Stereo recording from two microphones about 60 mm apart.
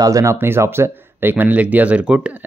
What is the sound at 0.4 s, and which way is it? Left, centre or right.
Speech, right.